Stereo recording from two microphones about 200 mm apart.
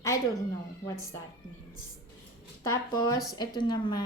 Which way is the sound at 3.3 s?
20° left (ahead or behind).